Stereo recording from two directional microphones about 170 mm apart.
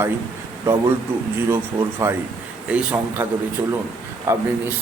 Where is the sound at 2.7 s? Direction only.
10° right (ahead or behind).